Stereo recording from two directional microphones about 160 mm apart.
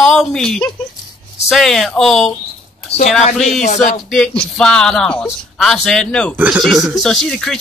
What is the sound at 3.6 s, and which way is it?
Speech, 45° left (ahead or behind).